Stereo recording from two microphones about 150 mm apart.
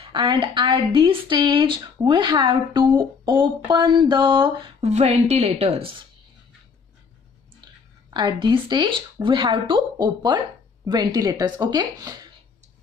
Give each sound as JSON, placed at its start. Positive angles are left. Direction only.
{"t": 0.0, "sound": "a woman's voice", "side_deg": -30}
{"t": 4.8, "sound": "a woman's voice", "side_deg": -45}
{"t": 8.1, "sound": "a woman's voice", "side_deg": -30}